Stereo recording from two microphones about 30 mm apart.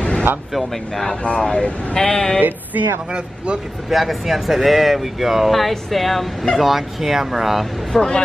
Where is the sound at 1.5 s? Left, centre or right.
Left.